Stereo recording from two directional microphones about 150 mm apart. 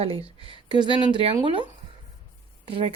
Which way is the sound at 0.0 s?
40° right (ahead or behind).